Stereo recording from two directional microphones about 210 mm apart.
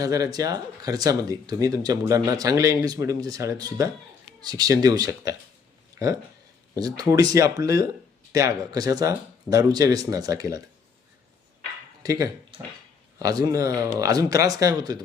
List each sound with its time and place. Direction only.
0.0 s speech: 15° right (ahead or behind)
12.0 s speech: 15° right (ahead or behind)